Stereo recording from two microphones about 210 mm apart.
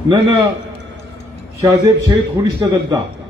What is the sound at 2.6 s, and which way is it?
Speech, 15° right (ahead or behind).